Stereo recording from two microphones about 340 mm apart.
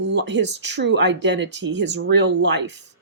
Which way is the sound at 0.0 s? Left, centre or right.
Right.